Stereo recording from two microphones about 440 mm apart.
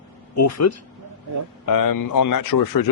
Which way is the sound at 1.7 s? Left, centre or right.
Left.